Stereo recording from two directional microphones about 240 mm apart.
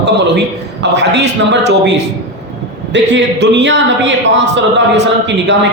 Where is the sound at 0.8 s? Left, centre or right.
Right.